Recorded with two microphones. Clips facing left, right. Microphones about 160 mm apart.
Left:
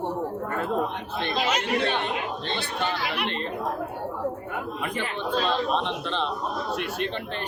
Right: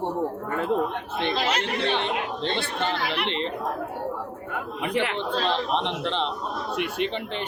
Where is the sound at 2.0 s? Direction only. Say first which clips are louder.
Right 2 dB; 20° right (ahead or behind).